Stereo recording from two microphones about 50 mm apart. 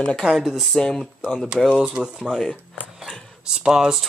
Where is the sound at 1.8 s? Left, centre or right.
Right.